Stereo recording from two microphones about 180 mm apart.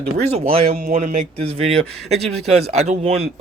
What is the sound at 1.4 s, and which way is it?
Speech, 35° right (ahead or behind).